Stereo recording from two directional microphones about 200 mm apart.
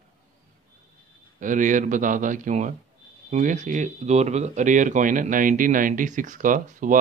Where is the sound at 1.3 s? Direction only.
40° right (ahead or behind).